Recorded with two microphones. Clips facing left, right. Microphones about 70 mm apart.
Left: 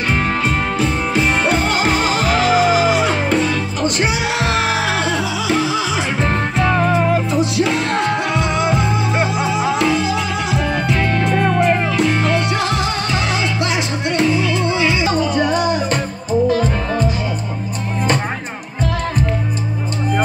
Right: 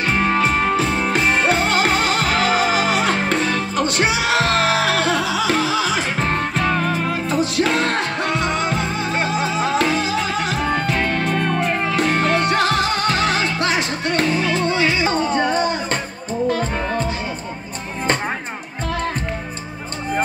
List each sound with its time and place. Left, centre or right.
0.2 s music: right
4.6 s music: right
7.2 s music: right
9.2 s music: centre
9.8 s music: right
12.0 s music: right